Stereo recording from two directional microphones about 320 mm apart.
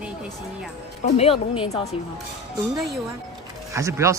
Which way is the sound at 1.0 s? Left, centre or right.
Centre.